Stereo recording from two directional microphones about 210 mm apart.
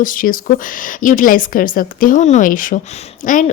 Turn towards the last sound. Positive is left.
turn(degrees=35)  # may be behind; listen again after turning